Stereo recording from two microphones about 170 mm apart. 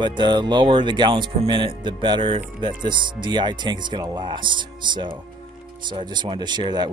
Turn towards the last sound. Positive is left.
turn(degrees=-25)  # may be behind; listen again after turning